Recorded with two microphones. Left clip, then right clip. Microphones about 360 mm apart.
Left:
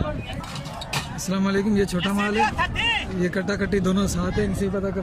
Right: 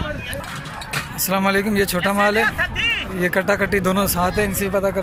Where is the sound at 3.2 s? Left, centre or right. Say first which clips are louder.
Right 7 dB; centre.